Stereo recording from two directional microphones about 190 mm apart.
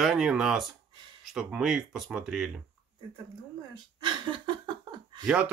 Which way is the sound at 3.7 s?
25° right (ahead or behind).